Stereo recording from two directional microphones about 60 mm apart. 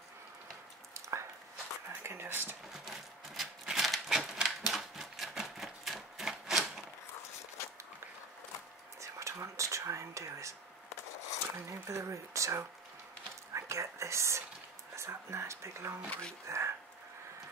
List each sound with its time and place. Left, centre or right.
0.9 s a sound: right
1.9 s whispering: right
2.7 s a sound: centre
9.0 s whispering: right
11.5 s speech: right
13.5 s whispering: right
15.0 s speech: right
16.1 s speech: centre
16.4 s speech: right